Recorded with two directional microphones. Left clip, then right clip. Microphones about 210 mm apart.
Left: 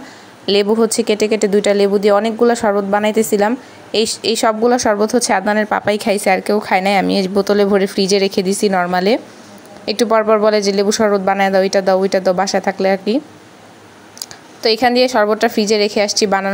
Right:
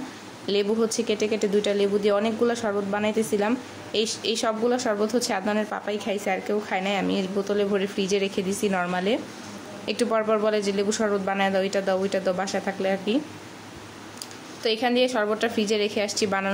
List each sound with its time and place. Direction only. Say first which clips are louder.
0.5 s a woman's voice: left 10 dB; 30° left (ahead or behind)
14.2 s a woman's voice: left 10 dB; 30° left (ahead or behind)